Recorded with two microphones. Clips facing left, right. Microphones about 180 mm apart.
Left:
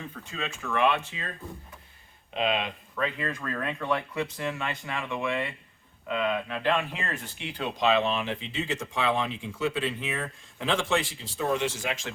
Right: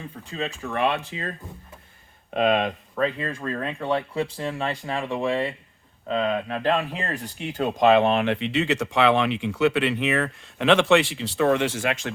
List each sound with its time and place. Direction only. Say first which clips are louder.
0.3 s speech: right 4 dB; 35° right (ahead or behind)
2.3 s speech: right 7 dB; 50° right (ahead or behind)